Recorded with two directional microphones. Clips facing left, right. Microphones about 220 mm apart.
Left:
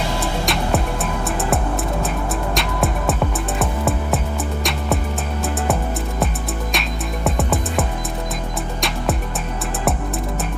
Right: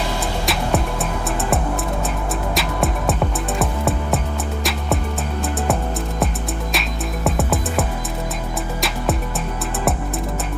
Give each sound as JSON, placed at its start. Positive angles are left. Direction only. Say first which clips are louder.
{"t": 0.2, "sound": "music", "louder": "left 1 dB", "side_deg": 0}
{"t": 2.6, "sound": "music", "louder": "even", "side_deg": 0}
{"t": 7.3, "sound": "music", "louder": "even", "side_deg": 0}